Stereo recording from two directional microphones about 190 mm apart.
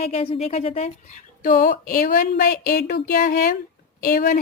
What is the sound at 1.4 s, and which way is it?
A woman's voice, 50° left (ahead or behind).